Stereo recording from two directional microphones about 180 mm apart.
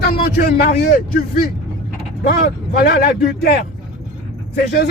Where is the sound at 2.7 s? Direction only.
55° left (ahead or behind).